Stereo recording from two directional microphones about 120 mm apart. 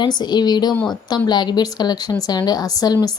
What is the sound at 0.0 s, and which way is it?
A woman's voice, 35° left (ahead or behind).